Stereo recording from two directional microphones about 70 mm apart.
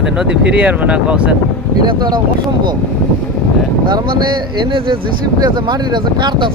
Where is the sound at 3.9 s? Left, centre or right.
Right.